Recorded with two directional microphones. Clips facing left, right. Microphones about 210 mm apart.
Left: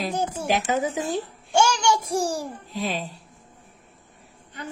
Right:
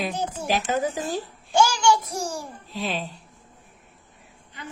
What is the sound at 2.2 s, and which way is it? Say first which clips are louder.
Speech: left 5 dB; 35° left (ahead or behind).